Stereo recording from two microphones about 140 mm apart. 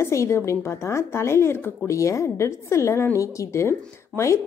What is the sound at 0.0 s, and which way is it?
A woman's voice, 20° left (ahead or behind).